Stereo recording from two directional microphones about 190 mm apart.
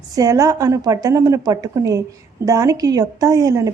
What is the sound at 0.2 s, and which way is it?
A woman's voice, 15° right (ahead or behind).